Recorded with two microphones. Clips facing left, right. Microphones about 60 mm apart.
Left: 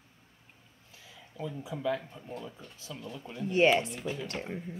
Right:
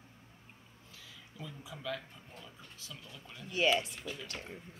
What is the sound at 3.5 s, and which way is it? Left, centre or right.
Speech, left.